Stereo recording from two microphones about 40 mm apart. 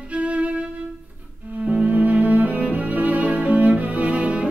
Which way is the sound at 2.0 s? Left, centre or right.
Right.